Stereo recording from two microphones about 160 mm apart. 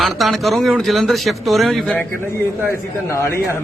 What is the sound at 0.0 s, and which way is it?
Speech, centre (ahead or behind).